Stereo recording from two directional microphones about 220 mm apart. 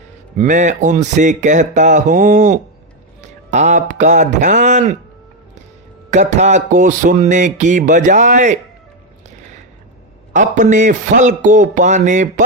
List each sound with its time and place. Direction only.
0.3 s speech: 35° right (ahead or behind)
6.1 s speech: 35° right (ahead or behind)
10.3 s speech: 35° right (ahead or behind)